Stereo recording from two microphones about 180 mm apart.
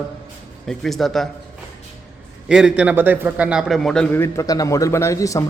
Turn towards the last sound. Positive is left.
turn(degrees=15)  # may be behind; listen again after turning